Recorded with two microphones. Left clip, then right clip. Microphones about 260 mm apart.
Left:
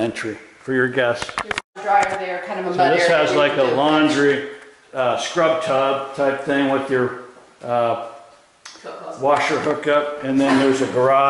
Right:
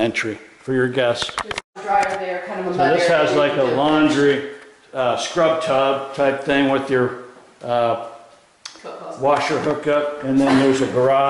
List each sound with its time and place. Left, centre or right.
0.0 s a man's voice: centre
9.5 s a man's voice: centre
10.2 s a man's voice: left
10.7 s speech: centre